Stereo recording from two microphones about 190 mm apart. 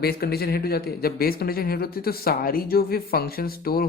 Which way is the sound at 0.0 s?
55° left (ahead or behind).